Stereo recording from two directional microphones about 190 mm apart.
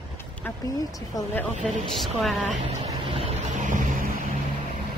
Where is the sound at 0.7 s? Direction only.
20° left (ahead or behind).